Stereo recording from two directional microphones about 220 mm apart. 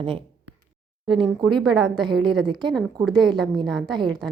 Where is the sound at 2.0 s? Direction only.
20° right (ahead or behind).